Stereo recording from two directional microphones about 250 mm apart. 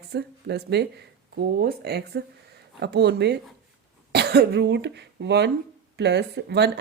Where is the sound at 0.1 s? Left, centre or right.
Right.